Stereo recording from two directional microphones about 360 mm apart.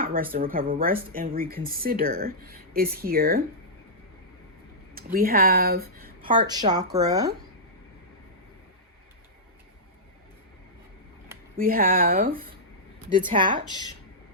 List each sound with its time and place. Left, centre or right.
0.0 s speech: right
4.9 s speech: right
6.2 s a woman's voice: centre
11.5 s a woman's voice: right
13.7 s speech: centre